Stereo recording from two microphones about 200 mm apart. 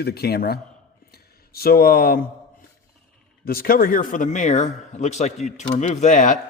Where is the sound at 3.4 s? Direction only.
50° left (ahead or behind).